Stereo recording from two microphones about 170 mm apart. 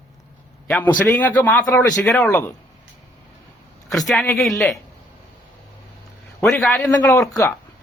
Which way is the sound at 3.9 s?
Centre (ahead or behind).